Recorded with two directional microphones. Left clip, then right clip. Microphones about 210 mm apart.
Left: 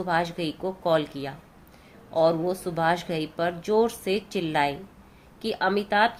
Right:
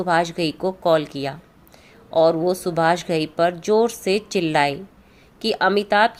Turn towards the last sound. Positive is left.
turn(degrees=-35)  # may be behind; listen again after turning